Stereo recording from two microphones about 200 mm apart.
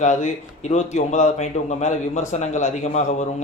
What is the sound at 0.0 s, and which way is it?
A man's voice, 35° left (ahead or behind).